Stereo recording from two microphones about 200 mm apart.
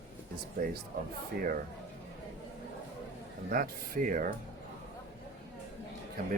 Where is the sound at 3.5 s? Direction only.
45° right (ahead or behind).